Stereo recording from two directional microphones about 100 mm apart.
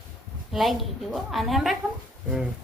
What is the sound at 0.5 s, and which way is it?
A woman's voice, centre (ahead or behind).